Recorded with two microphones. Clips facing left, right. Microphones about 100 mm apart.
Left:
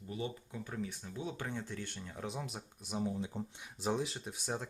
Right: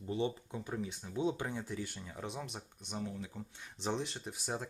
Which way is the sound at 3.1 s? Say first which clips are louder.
Left 5 dB; 20° left (ahead or behind).